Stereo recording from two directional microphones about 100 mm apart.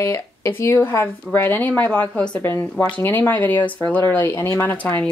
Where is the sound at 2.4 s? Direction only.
25° left (ahead or behind).